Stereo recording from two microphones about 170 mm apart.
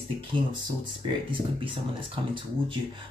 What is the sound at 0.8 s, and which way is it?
Speech, 30° right (ahead or behind).